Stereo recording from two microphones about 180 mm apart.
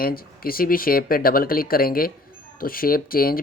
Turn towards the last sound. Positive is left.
turn(degrees=55)  # may be behind; listen again after turning